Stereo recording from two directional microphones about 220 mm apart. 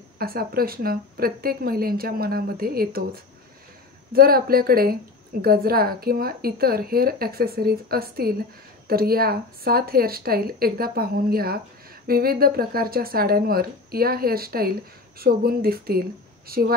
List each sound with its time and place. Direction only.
0.2 s speech: 40° right (ahead or behind)
4.1 s speech: 40° right (ahead or behind)